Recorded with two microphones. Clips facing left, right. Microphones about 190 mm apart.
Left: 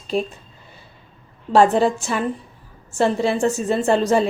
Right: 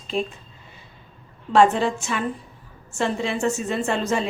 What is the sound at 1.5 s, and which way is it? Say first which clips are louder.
A woman's voice: left 3 dB; 35° left (ahead or behind).